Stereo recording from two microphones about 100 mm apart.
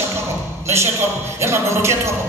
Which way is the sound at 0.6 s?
25° right (ahead or behind).